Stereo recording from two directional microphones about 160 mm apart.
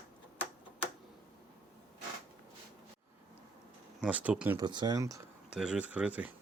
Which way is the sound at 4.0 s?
10° right (ahead or behind).